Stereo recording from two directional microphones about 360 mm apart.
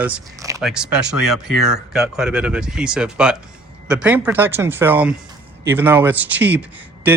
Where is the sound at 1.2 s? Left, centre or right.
Right.